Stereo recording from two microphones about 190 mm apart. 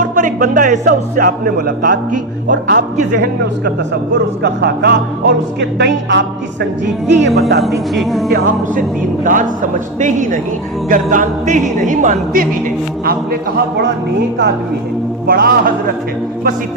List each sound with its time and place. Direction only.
0.0 s speech: 40° right (ahead or behind)
2.5 s speech: 65° right (ahead or behind)
4.1 s speech: 60° right (ahead or behind)
7.6 s speech: centre (ahead or behind)
8.3 s music: 45° right (ahead or behind)
10.0 s speech: 40° right (ahead or behind)
10.8 s music: 45° right (ahead or behind)
13.1 s speech: 55° right (ahead or behind)
15.3 s music: 50° right (ahead or behind)